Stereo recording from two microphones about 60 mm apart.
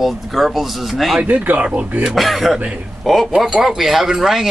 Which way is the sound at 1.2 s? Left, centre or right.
Right.